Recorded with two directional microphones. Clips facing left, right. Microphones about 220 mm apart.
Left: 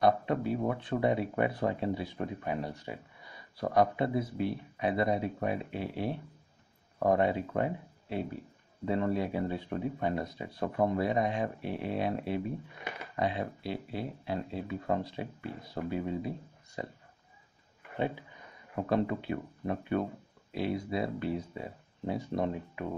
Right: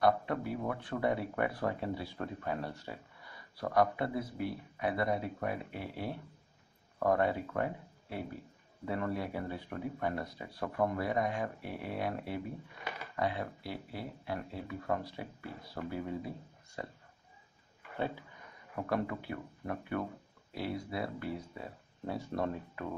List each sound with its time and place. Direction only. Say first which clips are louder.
0.0 s speech: left 3 dB; 20° left (ahead or behind)
18.8 s speech: left 5 dB; 25° left (ahead or behind)